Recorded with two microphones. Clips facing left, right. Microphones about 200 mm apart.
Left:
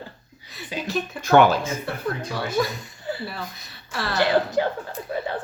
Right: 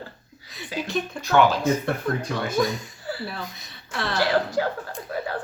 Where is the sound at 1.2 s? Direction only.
50° left (ahead or behind).